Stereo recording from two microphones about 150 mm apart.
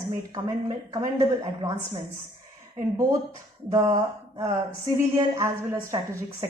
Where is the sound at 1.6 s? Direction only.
25° right (ahead or behind).